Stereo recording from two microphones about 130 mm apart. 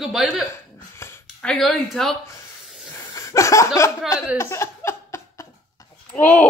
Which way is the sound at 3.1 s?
25° left (ahead or behind).